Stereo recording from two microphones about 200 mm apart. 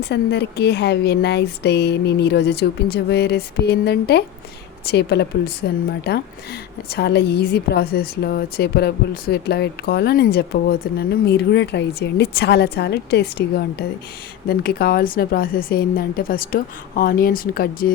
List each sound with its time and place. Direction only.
0.0 s a woman's voice: 55° left (ahead or behind)